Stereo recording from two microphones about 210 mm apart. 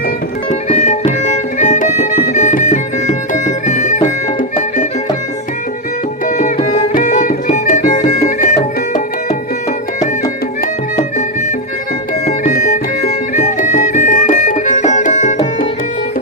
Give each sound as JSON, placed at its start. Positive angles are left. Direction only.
{"t": 0.7, "sound": "music", "side_deg": 35}
{"t": 6.2, "sound": "music", "side_deg": 35}
{"t": 12.5, "sound": "music", "side_deg": 40}